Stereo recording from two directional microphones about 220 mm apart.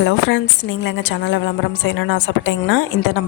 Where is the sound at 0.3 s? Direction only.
55° left (ahead or behind).